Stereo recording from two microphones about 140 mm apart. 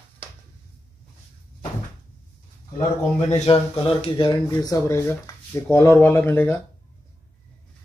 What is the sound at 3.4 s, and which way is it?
Speech, 40° left (ahead or behind).